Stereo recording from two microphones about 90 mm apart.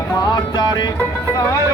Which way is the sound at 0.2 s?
50° left (ahead or behind).